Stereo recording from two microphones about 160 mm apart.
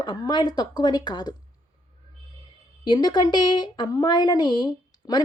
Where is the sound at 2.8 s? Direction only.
25° left (ahead or behind).